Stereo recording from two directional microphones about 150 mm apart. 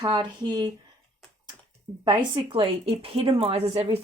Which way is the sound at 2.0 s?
35° right (ahead or behind).